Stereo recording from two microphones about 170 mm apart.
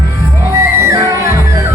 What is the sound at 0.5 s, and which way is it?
Music, 15° right (ahead or behind).